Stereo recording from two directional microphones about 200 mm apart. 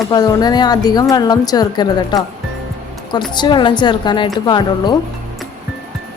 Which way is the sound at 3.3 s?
25° left (ahead or behind).